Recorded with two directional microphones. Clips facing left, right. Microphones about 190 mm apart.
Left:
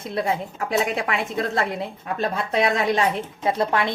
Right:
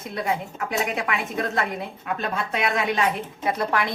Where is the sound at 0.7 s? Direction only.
30° left (ahead or behind).